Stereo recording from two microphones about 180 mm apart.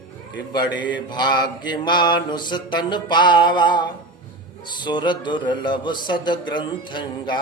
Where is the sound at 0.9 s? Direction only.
25° left (ahead or behind).